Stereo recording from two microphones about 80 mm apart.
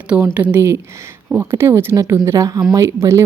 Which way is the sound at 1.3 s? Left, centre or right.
Right.